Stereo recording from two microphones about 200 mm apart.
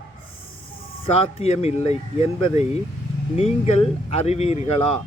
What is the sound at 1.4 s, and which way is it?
Speech, 30° left (ahead or behind).